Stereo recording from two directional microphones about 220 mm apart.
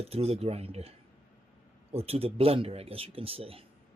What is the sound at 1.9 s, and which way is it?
Speech, 25° right (ahead or behind).